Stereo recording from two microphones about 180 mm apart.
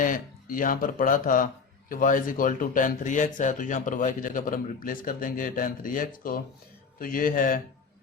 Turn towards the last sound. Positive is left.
turn(degrees=50)  # may be behind; listen again after turning